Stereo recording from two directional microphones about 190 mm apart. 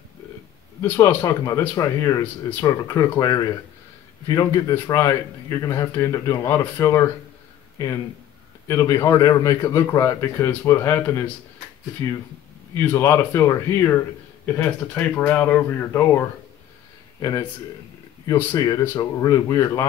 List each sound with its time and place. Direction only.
0.8 s a man's voice: 15° left (ahead or behind)
8.6 s a man's voice: 15° left (ahead or behind)